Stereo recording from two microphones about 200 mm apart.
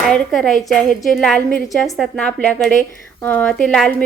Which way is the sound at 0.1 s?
Centre (ahead or behind).